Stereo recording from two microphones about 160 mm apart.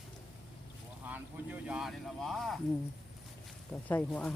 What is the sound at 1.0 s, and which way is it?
Speech, 10° right (ahead or behind).